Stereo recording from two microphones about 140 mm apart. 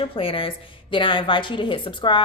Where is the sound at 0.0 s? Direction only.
40° left (ahead or behind).